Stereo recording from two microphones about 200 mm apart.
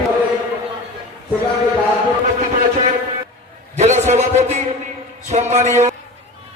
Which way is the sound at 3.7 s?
35° right (ahead or behind).